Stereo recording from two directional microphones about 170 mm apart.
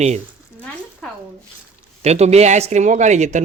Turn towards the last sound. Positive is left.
turn(degrees=-45)  # may be behind; listen again after turning